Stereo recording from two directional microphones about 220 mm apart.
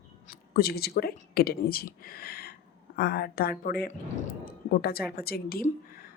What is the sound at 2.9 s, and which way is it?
Speech, 45° left (ahead or behind).